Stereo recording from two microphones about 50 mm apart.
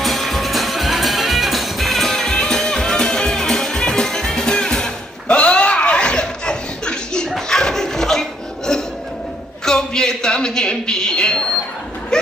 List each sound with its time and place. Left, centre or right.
0.0 s music: centre
5.3 s laughter: left
9.6 s a sound: centre
12.1 s vehicle: centre